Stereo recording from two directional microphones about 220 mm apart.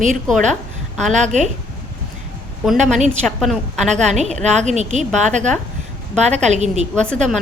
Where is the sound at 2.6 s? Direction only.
Centre (ahead or behind).